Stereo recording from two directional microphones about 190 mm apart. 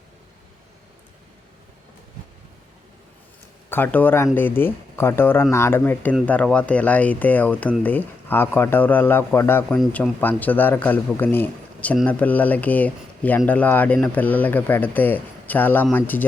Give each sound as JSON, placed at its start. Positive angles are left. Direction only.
{"t": 3.7, "sound": "a man's voice", "side_deg": 10}